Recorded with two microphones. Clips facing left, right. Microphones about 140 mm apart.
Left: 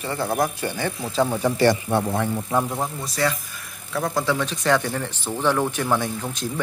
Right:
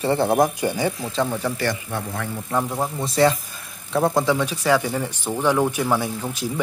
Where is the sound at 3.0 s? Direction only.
25° right (ahead or behind).